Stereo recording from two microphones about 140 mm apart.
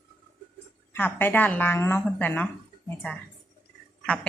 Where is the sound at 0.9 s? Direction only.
15° left (ahead or behind).